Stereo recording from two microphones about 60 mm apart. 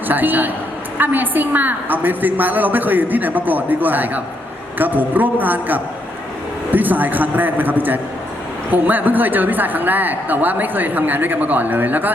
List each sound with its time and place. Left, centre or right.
0.1 s a man's voice: right